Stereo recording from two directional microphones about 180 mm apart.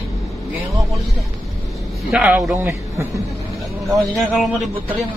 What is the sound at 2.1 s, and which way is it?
Speech, 5° right (ahead or behind).